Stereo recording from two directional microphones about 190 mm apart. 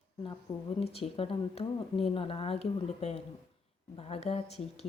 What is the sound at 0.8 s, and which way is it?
A woman's voice, 30° left (ahead or behind).